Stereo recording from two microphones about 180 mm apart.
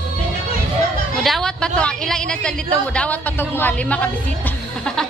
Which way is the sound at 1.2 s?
Centre (ahead or behind).